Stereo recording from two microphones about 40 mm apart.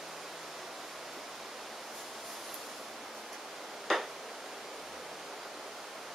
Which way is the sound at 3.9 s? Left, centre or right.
Centre.